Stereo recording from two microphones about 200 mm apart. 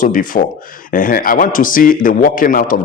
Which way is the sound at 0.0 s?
40° left (ahead or behind).